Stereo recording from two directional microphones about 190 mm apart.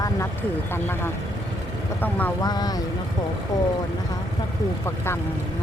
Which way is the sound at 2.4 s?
20° left (ahead or behind).